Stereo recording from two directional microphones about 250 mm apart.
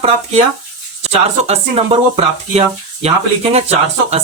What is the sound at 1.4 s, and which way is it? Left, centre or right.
Speech, right.